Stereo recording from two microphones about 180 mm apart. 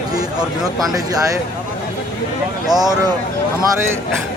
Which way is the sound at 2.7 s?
20° right (ahead or behind).